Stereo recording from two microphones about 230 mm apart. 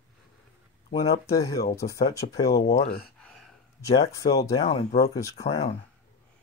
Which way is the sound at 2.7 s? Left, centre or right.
Left.